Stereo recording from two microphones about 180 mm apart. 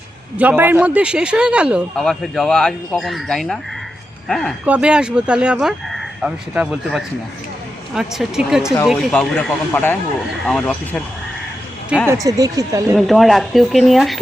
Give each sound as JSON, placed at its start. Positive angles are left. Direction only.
{"t": 0.3, "sound": "a man's voice", "side_deg": -10}
{"t": 12.2, "sound": "speech", "side_deg": -20}
{"t": 13.0, "sound": "a man's voice", "side_deg": 0}